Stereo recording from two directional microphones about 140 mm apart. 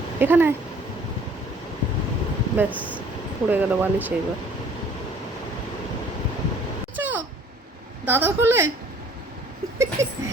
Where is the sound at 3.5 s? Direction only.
10° right (ahead or behind).